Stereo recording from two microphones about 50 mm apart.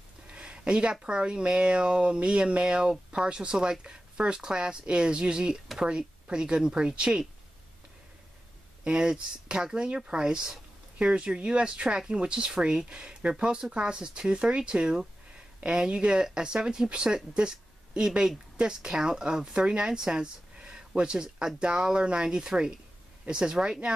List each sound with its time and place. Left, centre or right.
0.3 s a sound: centre
1.0 s speech: centre
8.8 s speech: centre